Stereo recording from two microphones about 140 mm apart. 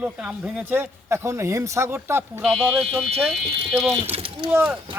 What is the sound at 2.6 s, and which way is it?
Speech, 10° right (ahead or behind).